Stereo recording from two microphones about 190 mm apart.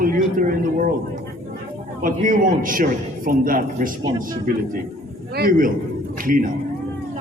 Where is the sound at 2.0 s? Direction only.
45° right (ahead or behind).